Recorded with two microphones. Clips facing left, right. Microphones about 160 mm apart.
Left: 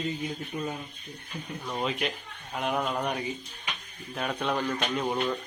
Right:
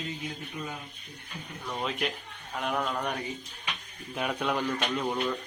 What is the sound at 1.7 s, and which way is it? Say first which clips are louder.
A man's voice: left 1 dB; 5° left (ahead or behind).